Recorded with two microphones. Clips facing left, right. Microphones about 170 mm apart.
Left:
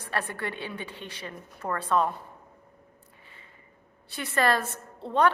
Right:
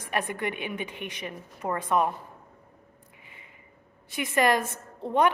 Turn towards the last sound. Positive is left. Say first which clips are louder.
# even
turn(degrees=-15)  # may be behind; listen again after turning